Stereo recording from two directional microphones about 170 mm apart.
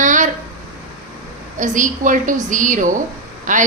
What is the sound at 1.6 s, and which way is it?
Speech, 50° right (ahead or behind).